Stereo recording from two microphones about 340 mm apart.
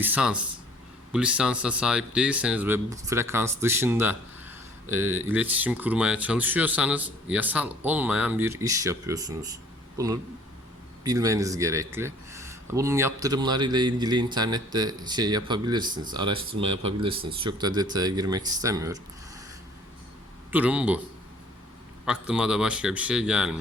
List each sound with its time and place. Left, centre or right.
0.0 s speech: centre
11.0 s speech: centre
20.5 s speech: centre
22.0 s speech: centre